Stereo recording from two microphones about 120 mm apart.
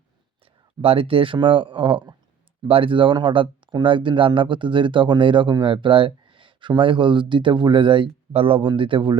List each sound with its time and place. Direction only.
0.8 s speech: 50° right (ahead or behind)